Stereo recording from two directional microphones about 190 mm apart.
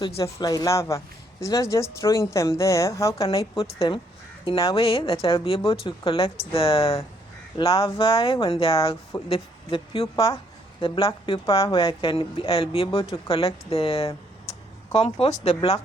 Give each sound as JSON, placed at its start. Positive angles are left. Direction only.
{"t": 0.0, "sound": "speech", "side_deg": 20}
{"t": 3.6, "sound": "a woman's voice", "side_deg": 30}